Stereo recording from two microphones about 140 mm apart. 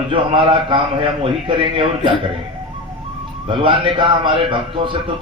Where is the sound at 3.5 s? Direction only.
35° right (ahead or behind).